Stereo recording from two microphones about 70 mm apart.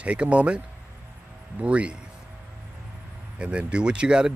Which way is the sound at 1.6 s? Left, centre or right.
Centre.